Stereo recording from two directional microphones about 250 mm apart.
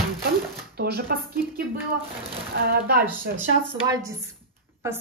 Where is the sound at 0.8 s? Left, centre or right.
Right.